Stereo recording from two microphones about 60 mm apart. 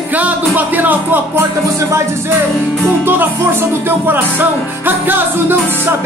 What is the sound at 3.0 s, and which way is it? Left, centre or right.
Music, right.